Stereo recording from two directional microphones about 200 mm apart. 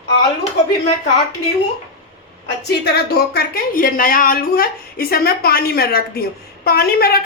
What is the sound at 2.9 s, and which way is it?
A woman's voice, 50° left (ahead or behind).